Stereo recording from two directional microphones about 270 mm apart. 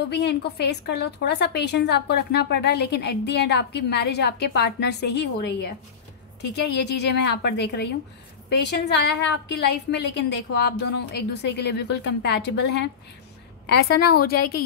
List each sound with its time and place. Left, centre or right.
0.1 s a woman's voice: left